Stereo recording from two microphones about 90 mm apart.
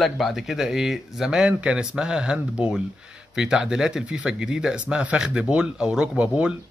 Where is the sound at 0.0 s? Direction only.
Centre (ahead or behind).